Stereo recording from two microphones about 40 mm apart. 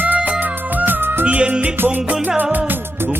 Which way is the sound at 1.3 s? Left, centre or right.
Right.